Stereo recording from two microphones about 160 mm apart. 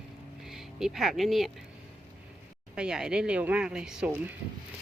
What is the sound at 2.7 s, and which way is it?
Speech, 5° right (ahead or behind).